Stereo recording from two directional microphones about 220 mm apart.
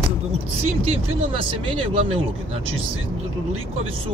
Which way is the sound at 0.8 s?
25° right (ahead or behind).